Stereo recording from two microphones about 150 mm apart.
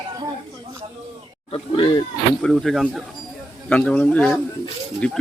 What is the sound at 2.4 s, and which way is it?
A man's voice, centre (ahead or behind).